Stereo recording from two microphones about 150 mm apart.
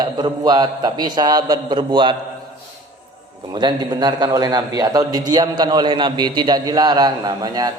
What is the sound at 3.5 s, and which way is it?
A man's voice, 25° right (ahead or behind).